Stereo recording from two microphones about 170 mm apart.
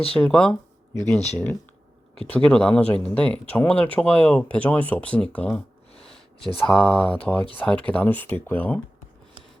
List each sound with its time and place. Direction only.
0.1 s speech: 5° left (ahead or behind)
5.9 s a sound: 35° left (ahead or behind)
6.6 s speech: 5° left (ahead or behind)